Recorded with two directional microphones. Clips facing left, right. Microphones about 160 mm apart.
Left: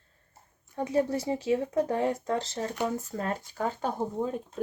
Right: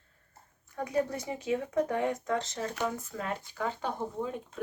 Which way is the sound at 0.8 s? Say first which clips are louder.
Left 4 dB; 30° left (ahead or behind).